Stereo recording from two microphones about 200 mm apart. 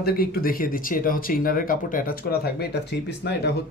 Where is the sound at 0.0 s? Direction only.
50° left (ahead or behind).